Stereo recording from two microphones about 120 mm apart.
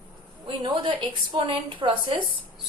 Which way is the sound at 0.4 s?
45° right (ahead or behind).